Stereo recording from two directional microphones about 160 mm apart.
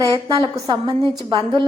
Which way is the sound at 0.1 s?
30° right (ahead or behind).